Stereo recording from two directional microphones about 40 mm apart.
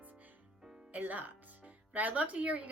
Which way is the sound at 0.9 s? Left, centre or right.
Right.